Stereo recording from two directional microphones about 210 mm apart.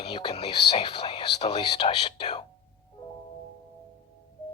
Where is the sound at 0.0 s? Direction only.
25° left (ahead or behind).